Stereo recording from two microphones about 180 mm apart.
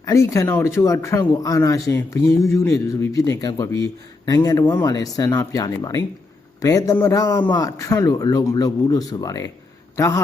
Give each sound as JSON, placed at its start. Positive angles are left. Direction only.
{"t": 0.0, "sound": "a man's voice", "side_deg": 15}